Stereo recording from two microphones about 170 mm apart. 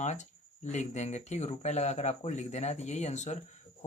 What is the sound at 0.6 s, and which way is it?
Speech, 45° left (ahead or behind).